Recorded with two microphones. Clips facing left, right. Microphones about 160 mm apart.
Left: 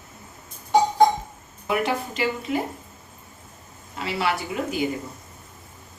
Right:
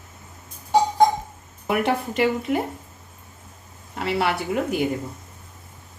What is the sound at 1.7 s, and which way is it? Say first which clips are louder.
Speech: right 2 dB; 55° right (ahead or behind).